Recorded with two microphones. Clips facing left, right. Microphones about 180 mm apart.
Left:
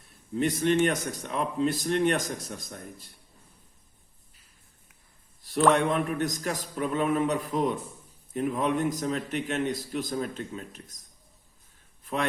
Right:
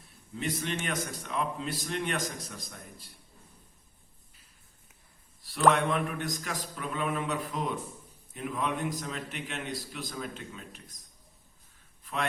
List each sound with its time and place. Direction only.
0.3 s a man's voice: 50° left (ahead or behind)
5.5 s a man's voice: 45° left (ahead or behind)